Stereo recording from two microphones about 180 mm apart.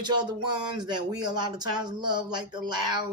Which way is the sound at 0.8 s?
25° right (ahead or behind).